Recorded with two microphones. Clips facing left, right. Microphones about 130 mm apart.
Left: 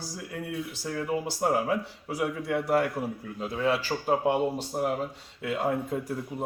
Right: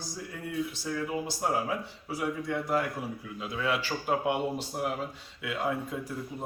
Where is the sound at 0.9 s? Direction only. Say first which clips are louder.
Left 2 dB; 50° left (ahead or behind); by 2.9 s 65° left (ahead or behind).